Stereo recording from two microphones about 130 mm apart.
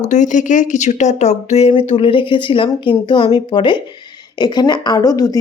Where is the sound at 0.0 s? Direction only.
70° left (ahead or behind).